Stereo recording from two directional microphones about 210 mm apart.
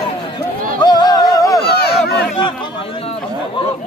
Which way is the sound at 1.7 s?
50° left (ahead or behind).